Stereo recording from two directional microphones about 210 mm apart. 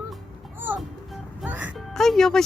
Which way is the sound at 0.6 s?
10° right (ahead or behind).